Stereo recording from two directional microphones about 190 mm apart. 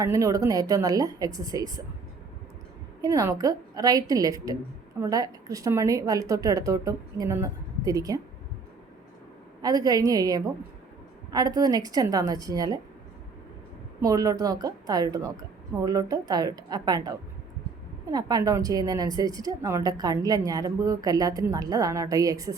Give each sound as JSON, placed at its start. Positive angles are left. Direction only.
{"t": 0.0, "sound": "a woman's voice", "side_deg": -15}
{"t": 3.0, "sound": "a woman's voice", "side_deg": -20}
{"t": 9.6, "sound": "a woman's voice", "side_deg": -20}
{"t": 14.0, "sound": "a woman's voice", "side_deg": -20}